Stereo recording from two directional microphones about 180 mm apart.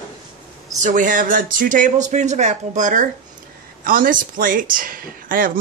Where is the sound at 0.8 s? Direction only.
45° right (ahead or behind).